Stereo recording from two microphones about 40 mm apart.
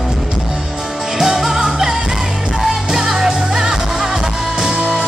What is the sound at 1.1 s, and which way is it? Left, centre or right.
Music, centre.